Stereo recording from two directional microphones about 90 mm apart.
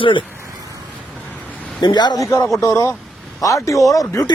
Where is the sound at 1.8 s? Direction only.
55° left (ahead or behind).